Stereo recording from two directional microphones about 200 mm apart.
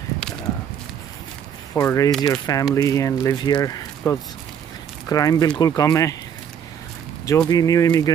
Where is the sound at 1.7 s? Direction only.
15° left (ahead or behind).